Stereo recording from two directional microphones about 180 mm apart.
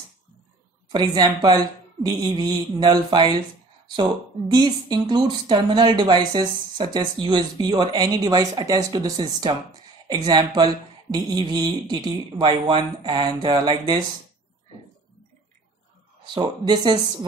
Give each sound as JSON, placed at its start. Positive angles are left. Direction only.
{"t": 0.8, "sound": "speech", "side_deg": -25}
{"t": 16.3, "sound": "speech", "side_deg": -25}